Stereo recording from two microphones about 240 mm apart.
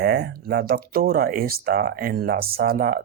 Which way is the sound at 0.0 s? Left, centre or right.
Right.